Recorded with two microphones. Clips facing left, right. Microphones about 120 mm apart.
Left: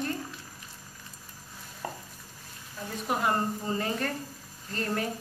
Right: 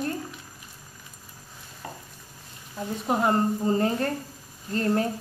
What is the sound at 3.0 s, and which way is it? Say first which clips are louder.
A woman's voice: right 5 dB; 30° right (ahead or behind).